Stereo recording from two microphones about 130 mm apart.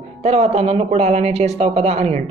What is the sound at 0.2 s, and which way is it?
Speech, 55° right (ahead or behind).